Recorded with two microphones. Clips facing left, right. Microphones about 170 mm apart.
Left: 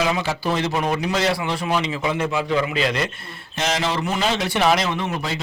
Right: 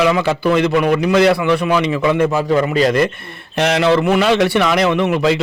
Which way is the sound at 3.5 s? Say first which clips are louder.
Right 9 dB; 65° right (ahead or behind).